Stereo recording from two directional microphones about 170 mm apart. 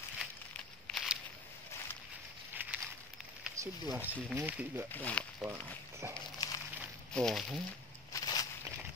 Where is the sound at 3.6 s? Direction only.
15° right (ahead or behind).